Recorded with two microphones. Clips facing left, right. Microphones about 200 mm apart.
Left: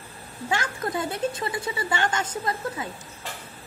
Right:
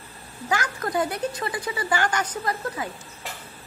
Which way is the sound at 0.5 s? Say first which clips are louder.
Right 1 dB; 25° left (ahead or behind).